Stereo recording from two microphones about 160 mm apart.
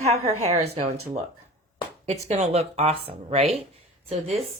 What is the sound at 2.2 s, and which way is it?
Speech, 45° right (ahead or behind).